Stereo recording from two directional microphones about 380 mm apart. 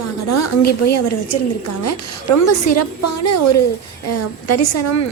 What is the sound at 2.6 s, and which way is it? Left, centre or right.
A woman's voice, left.